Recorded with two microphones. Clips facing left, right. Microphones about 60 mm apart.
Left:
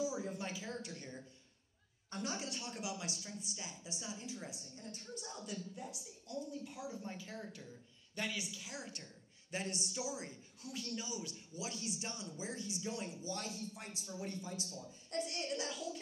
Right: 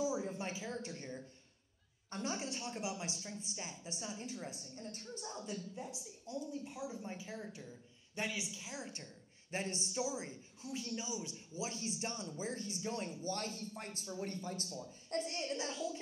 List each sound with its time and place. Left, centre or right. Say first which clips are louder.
0.2 s a woman's voice: right 1 dB; right